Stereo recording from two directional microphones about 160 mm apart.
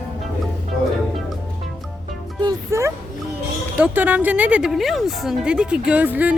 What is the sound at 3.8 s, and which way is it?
A woman's voice, 10° right (ahead or behind).